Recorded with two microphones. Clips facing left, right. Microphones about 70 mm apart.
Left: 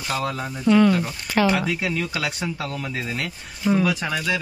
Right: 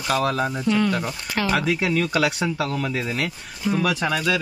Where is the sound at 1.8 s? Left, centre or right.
Right.